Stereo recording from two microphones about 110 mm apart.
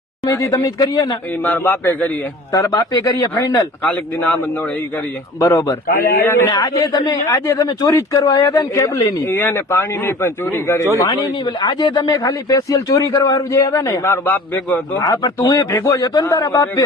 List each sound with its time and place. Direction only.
0.3 s speech: 30° left (ahead or behind)
1.5 s a man's voice: 20° left (ahead or behind)
2.5 s speech: 35° left (ahead or behind)
3.8 s a man's voice: 15° left (ahead or behind)
5.4 s speech: 25° left (ahead or behind)
6.5 s speech: 35° left (ahead or behind)
9.2 s speech: 20° left (ahead or behind)
13.1 s a man's voice: 45° left (ahead or behind)
13.3 s speech: 30° left (ahead or behind)
14.9 s speech: 35° left (ahead or behind)